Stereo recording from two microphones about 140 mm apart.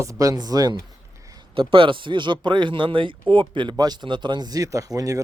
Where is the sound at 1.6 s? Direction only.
40° right (ahead or behind).